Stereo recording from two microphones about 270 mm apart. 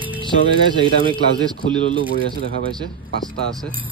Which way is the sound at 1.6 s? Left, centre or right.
Centre.